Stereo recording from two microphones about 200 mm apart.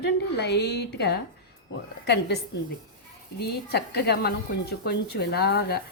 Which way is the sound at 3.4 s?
55° left (ahead or behind).